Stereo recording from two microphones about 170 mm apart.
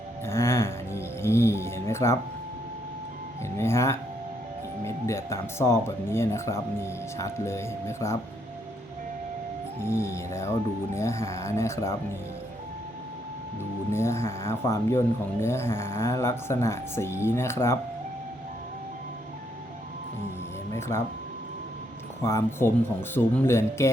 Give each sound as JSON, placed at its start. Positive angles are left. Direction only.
{"t": 0.3, "sound": "music", "side_deg": 15}
{"t": 3.6, "sound": "speech", "side_deg": 15}
{"t": 9.8, "sound": "speech", "side_deg": 15}
{"t": 13.9, "sound": "speech", "side_deg": 15}
{"t": 20.7, "sound": "speech", "side_deg": 15}
{"t": 22.2, "sound": "speech", "side_deg": 15}